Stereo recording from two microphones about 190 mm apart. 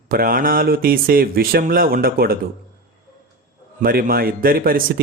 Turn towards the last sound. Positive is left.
turn(degrees=-50)  # may be behind; listen again after turning